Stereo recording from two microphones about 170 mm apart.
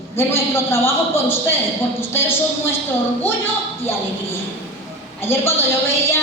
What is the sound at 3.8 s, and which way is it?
A woman's voice, 15° left (ahead or behind).